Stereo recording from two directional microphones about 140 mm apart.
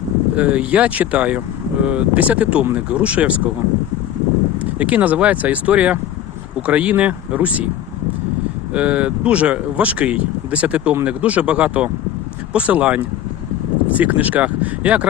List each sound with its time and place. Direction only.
0.3 s speech: 10° right (ahead or behind)
4.6 s speech: 10° right (ahead or behind)
8.7 s speech: 10° right (ahead or behind)